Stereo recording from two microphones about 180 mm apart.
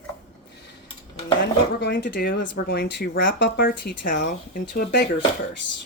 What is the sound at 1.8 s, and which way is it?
Speech, 70° left (ahead or behind).